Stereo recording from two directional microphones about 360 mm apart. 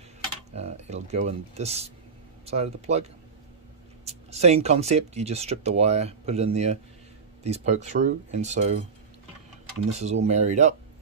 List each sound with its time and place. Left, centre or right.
0.5 s speech: centre
9.9 s speech: centre